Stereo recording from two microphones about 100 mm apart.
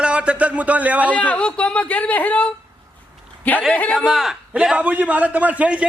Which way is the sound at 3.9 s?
5° right (ahead or behind).